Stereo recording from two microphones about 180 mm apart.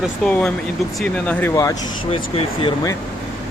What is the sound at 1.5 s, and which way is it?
Speech, 20° left (ahead or behind).